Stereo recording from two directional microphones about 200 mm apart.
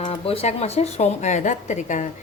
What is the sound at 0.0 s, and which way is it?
Speech, 30° left (ahead or behind).